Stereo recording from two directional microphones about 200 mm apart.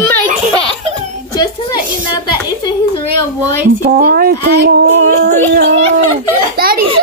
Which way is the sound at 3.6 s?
45° right (ahead or behind).